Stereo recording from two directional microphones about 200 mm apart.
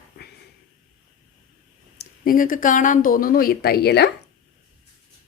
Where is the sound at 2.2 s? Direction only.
45° left (ahead or behind).